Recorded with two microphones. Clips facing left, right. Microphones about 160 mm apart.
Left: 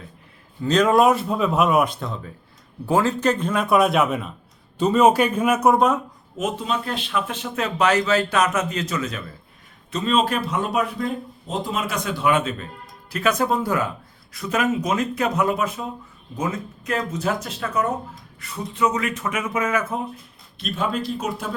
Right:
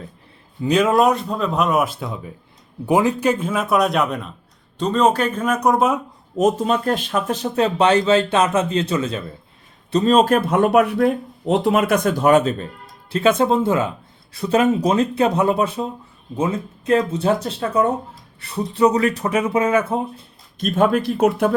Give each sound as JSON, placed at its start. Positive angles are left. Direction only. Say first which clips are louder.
{"t": 0.6, "sound": "speech", "louder": "right 1 dB", "side_deg": -10}
{"t": 6.3, "sound": "speech", "louder": "right 8 dB", "side_deg": -40}
{"t": 13.1, "sound": "speech", "louder": "right 5 dB", "side_deg": -25}
{"t": 20.6, "sound": "speech", "louder": "right 8 dB", "side_deg": -50}